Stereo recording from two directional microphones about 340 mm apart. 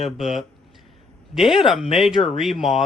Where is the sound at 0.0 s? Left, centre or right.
Centre.